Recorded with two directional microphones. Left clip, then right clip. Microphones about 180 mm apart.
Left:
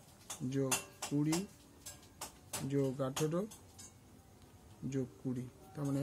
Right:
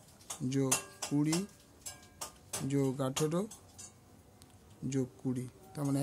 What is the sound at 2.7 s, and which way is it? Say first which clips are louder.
Speech: right 2 dB; 70° right (ahead or behind).